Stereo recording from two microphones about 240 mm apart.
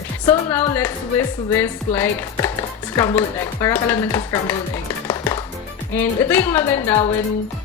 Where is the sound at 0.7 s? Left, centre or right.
Centre.